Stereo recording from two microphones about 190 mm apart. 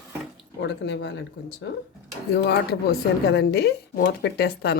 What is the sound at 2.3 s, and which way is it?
Speech, 60° left (ahead or behind).